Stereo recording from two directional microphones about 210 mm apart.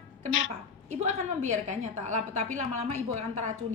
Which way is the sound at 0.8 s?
35° right (ahead or behind).